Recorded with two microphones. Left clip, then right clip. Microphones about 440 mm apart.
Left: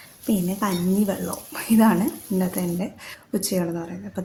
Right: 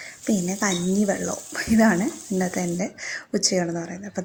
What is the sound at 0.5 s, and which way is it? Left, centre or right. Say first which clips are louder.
Speech: even; left.